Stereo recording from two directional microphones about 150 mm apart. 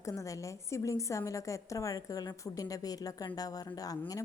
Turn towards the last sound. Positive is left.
turn(degrees=25)  # may be behind; listen again after turning